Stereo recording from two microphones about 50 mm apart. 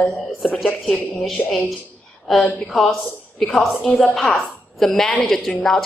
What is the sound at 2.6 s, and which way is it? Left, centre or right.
A woman's voice, centre.